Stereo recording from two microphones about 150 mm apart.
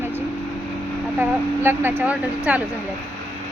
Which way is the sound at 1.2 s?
15° right (ahead or behind).